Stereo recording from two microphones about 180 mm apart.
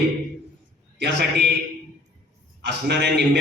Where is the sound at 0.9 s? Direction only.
70° right (ahead or behind).